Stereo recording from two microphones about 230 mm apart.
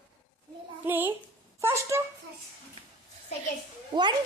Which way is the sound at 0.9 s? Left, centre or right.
Centre.